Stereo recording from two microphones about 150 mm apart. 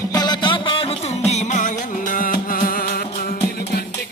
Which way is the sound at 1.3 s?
50° left (ahead or behind).